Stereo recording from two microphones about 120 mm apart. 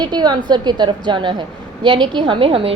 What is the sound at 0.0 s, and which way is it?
A woman's voice, 35° right (ahead or behind).